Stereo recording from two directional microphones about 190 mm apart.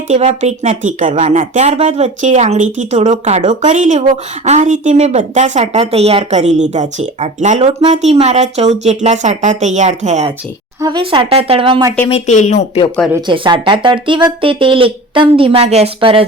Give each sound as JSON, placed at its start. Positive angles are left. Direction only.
{"t": 0.1, "sound": "speech", "side_deg": -35}
{"t": 10.8, "sound": "speech", "side_deg": -25}
{"t": 12.0, "sound": "speech", "side_deg": 35}
{"t": 13.2, "sound": "speech", "side_deg": -25}